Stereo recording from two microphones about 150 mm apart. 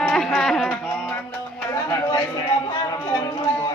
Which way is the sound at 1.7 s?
20° left (ahead or behind).